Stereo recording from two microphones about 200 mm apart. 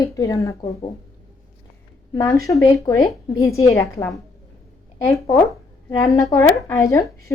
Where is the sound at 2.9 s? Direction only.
15° left (ahead or behind).